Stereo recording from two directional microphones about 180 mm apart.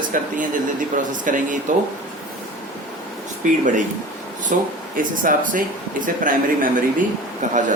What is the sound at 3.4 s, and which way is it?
Speech, 45° right (ahead or behind).